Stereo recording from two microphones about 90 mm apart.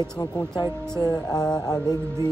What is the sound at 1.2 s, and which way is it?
Speech, 10° left (ahead or behind).